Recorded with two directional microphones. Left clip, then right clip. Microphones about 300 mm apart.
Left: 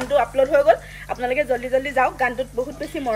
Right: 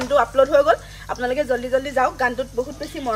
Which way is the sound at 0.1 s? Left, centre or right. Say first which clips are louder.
Right 2 dB; centre.